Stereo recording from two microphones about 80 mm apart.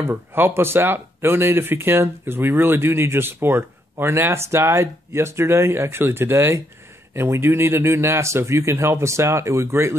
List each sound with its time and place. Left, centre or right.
0.0 s speech: right